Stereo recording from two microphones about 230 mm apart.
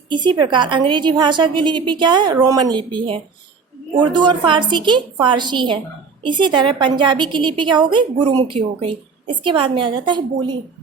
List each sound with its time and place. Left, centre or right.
0.1 s a woman's voice: centre